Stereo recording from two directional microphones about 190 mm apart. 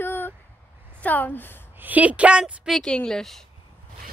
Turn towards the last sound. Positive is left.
turn(degrees=0)  # may be behind; listen again after turning